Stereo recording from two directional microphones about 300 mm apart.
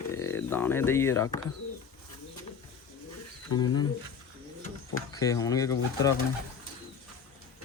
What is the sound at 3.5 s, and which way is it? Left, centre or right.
Speech, left.